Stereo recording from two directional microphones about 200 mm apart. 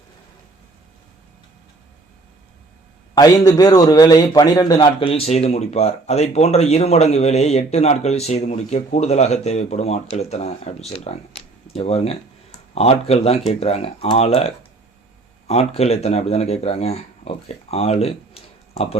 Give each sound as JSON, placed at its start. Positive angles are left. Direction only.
{"t": 3.2, "sound": "a man's voice", "side_deg": 20}